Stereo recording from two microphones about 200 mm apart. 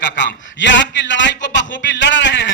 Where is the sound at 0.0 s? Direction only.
65° left (ahead or behind).